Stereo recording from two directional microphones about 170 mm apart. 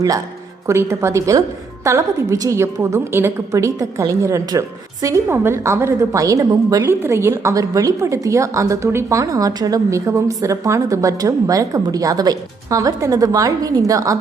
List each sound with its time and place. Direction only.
0.7 s a woman's voice: 15° right (ahead or behind)